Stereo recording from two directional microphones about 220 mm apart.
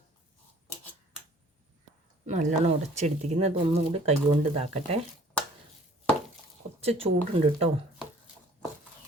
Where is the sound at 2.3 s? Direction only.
30° right (ahead or behind).